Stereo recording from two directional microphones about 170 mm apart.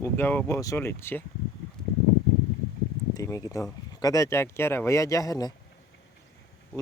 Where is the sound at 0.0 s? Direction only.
15° left (ahead or behind).